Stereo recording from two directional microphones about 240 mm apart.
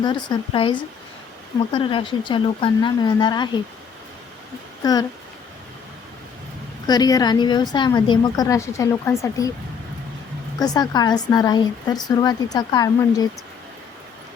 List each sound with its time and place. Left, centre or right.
0.0 s speech: centre
4.8 s speech: centre
6.8 s a woman's voice: centre
10.6 s a woman's voice: centre